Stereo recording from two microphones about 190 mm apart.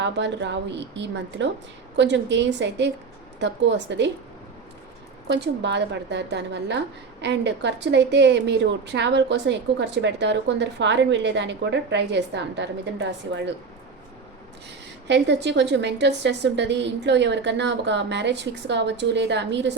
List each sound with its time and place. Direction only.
0.0 s a woman's voice: 70° right (ahead or behind)
5.3 s a woman's voice: 65° right (ahead or behind)
15.0 s a woman's voice: 65° right (ahead or behind)